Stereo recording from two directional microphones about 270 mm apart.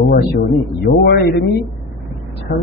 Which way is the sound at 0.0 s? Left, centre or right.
Left.